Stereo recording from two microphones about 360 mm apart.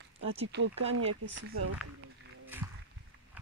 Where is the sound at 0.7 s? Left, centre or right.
Centre.